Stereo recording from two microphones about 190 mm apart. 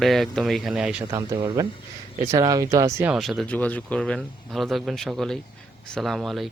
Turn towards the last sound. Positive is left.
turn(degrees=0)  # may be behind; listen again after turning